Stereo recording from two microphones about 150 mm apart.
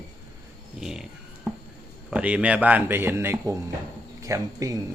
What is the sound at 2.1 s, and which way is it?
Speech, 10° right (ahead or behind).